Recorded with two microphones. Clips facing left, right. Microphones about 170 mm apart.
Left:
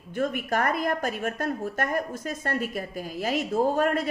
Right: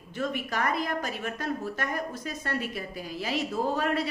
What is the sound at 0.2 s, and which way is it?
A woman's voice, 50° left (ahead or behind).